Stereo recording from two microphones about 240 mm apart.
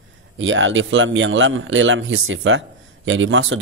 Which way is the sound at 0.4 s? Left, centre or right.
Right.